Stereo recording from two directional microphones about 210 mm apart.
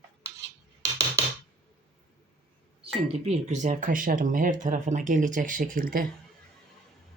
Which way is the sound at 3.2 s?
30° right (ahead or behind).